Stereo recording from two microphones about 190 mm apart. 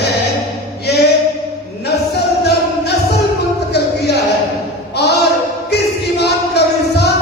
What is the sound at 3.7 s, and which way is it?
Music, 60° left (ahead or behind).